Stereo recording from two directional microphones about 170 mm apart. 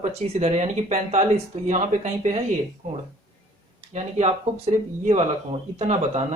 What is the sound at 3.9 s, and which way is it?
Speech, 40° right (ahead or behind).